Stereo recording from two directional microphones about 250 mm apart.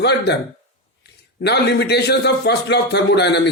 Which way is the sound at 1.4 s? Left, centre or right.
Left.